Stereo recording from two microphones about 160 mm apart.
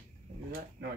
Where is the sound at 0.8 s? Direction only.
90° right.